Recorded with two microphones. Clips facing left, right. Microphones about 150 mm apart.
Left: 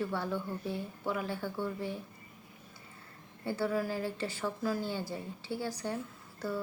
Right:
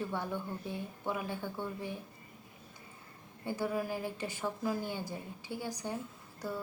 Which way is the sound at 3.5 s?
15° right (ahead or behind).